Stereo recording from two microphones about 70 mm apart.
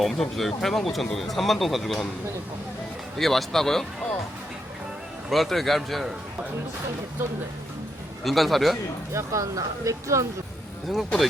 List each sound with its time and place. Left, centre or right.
0.0 s speech: centre
3.2 s speech: centre
5.3 s speech: centre
8.2 s speech: centre
9.1 s speech: right